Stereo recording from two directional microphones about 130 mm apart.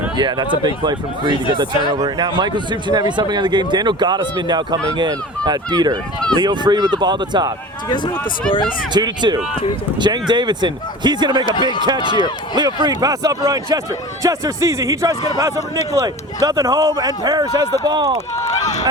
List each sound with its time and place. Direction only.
0.2 s speech: 35° right (ahead or behind)
7.9 s speech: 35° left (ahead or behind)
8.9 s speech: 35° right (ahead or behind)
11.4 s speech: 35° left (ahead or behind)
12.5 s a man's voice: 30° right (ahead or behind)
18.3 s run: 60° left (ahead or behind)